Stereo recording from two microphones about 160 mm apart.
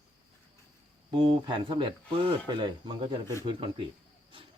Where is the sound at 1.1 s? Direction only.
30° right (ahead or behind).